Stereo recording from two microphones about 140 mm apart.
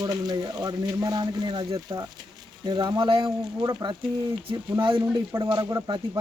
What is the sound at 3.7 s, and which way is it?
Speech, 25° right (ahead or behind).